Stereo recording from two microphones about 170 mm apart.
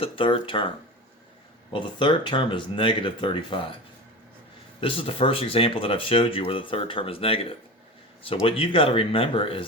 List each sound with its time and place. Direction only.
0.0 s speech: 30° left (ahead or behind)
1.7 s speech: 30° left (ahead or behind)
4.8 s speech: 35° left (ahead or behind)